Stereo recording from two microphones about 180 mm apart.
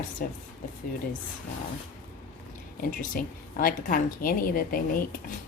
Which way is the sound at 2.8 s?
50° left (ahead or behind).